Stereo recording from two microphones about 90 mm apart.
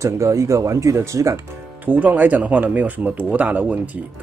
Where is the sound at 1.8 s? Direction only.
20° right (ahead or behind).